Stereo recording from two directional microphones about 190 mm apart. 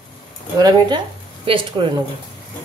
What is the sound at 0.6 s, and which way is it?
Speech, 20° right (ahead or behind).